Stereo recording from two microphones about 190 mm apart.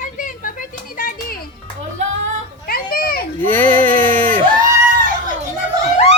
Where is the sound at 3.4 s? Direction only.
10° left (ahead or behind).